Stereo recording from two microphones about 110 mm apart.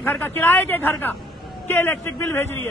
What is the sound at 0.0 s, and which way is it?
Speech, 20° left (ahead or behind).